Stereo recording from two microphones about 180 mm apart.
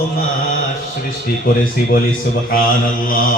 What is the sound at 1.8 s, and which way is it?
Speech, 50° left (ahead or behind).